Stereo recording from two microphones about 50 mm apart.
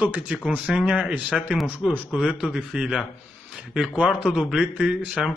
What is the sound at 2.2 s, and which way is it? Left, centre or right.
Speech, right.